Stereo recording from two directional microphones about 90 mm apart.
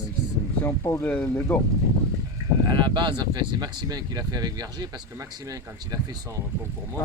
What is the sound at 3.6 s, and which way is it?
Speech, 50° right (ahead or behind).